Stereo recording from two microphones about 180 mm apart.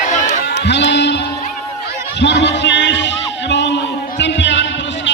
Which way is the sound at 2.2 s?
75° left (ahead or behind).